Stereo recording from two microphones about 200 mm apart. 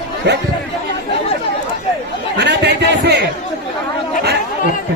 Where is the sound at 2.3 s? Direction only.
60° right (ahead or behind).